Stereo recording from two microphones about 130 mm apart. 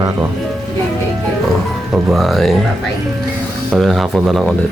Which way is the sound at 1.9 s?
Centre (ahead or behind).